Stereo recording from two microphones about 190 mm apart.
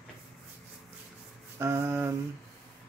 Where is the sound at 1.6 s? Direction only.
15° right (ahead or behind).